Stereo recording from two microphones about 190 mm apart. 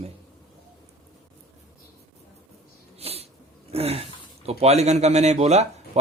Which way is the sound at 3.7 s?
30° right (ahead or behind).